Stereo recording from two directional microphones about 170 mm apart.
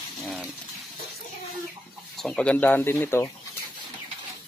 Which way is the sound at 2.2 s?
5° left (ahead or behind).